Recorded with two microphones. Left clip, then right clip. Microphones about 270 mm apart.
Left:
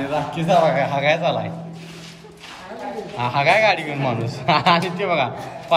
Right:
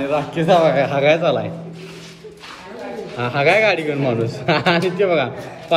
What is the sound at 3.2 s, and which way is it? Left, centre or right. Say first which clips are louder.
A man's voice: right 1 dB; centre.